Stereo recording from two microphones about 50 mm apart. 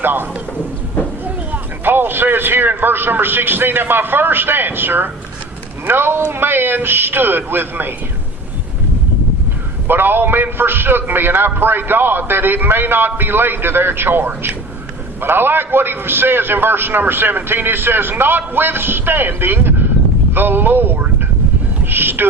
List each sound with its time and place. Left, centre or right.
0.0 s a man's voice: right
9.8 s a man's voice: right
21.8 s music: right